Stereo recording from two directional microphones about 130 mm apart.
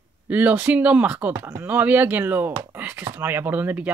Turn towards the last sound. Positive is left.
turn(degrees=-15)  # may be behind; listen again after turning